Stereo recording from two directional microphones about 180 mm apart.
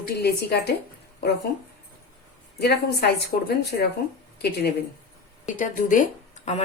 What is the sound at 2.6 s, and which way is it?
Speech, 65° left (ahead or behind).